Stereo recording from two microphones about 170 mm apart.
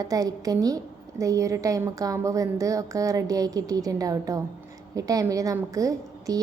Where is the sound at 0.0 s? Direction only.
20° right (ahead or behind).